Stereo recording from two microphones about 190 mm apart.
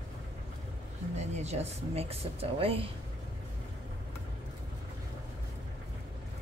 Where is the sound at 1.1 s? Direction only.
35° right (ahead or behind).